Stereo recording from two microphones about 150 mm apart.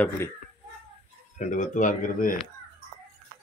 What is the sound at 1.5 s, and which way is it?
Speech, 60° left (ahead or behind).